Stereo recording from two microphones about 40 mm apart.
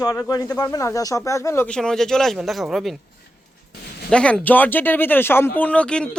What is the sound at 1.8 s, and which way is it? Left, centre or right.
Speech, centre.